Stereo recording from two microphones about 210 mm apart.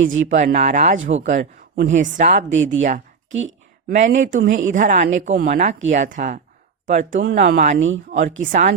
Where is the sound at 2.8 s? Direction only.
40° right (ahead or behind).